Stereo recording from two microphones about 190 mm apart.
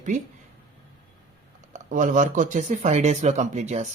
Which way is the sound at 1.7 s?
40° right (ahead or behind).